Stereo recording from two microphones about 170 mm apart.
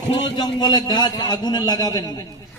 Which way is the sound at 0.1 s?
25° left (ahead or behind).